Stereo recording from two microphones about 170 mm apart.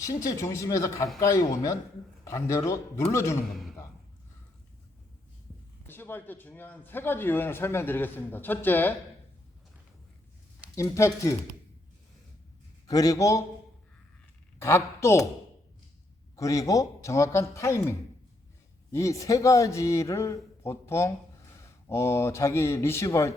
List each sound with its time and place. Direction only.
0.0 s a man's voice: 20° left (ahead or behind)
3.5 s speech: centre (ahead or behind)
5.9 s a man's voice: 10° left (ahead or behind)
10.8 s speech: 15° left (ahead or behind)
12.9 s speech: 20° left (ahead or behind)
14.6 s a man's voice: 15° left (ahead or behind)
16.3 s a man's voice: 20° left (ahead or behind)